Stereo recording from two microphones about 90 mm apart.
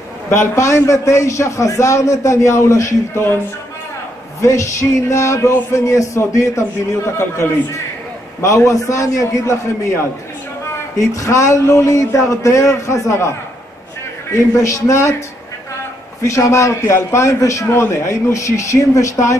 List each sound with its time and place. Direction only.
0.3 s a man's voice: 35° left (ahead or behind)
4.4 s a man's voice: 35° left (ahead or behind)
14.3 s a man's voice: 35° left (ahead or behind)
16.3 s a man's voice: 35° left (ahead or behind)